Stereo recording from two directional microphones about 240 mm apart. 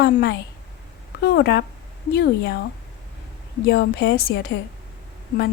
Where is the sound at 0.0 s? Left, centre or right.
Left.